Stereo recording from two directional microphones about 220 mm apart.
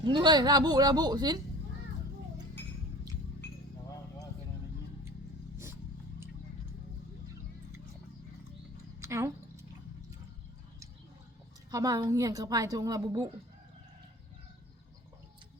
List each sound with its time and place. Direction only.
0.0 s speech: 20° right (ahead or behind)
9.0 s a sound: 10° right (ahead or behind)
11.7 s a woman's voice: 15° right (ahead or behind)